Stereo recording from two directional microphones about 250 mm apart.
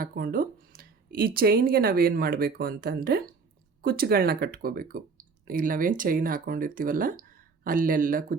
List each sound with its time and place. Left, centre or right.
0.0 s speech: right